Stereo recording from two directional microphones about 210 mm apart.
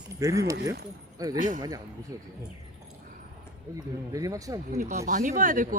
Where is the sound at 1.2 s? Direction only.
15° right (ahead or behind).